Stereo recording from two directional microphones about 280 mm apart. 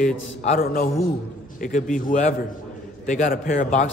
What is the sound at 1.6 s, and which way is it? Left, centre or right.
A man's voice, left.